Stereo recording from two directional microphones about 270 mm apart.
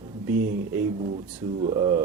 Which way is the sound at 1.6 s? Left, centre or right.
Centre.